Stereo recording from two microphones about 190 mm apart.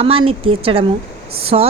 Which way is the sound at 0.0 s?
30° right (ahead or behind).